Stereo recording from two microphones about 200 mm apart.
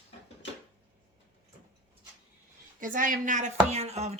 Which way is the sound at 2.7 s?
40° right (ahead or behind).